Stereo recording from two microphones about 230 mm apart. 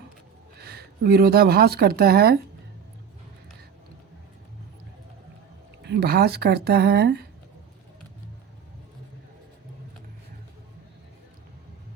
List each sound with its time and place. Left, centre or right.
0.6 s speech: right
5.8 s speech: right